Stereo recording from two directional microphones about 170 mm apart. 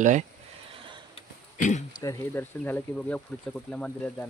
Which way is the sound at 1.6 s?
45° left (ahead or behind).